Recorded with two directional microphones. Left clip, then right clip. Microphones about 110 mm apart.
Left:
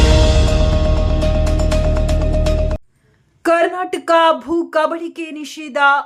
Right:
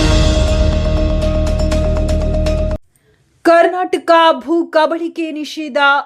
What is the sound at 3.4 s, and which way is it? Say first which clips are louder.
A woman's voice: right 5 dB; 25° right (ahead or behind).